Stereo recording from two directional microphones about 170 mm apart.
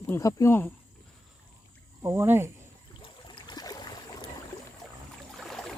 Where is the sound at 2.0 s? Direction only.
15° right (ahead or behind).